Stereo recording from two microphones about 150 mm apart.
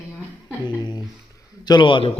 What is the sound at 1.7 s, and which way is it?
Speech, 30° left (ahead or behind).